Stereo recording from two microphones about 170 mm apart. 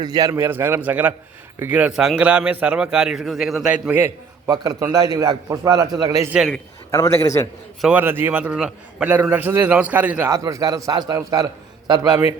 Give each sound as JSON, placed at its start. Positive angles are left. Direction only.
{"t": 0.0, "sound": "a man's voice", "side_deg": -20}
{"t": 6.3, "sound": "a man's voice", "side_deg": -5}
{"t": 6.9, "sound": "a man's voice", "side_deg": 20}
{"t": 7.8, "sound": "a man's voice", "side_deg": -10}